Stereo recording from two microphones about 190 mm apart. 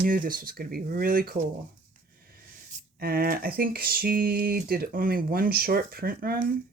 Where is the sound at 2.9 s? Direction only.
50° right (ahead or behind).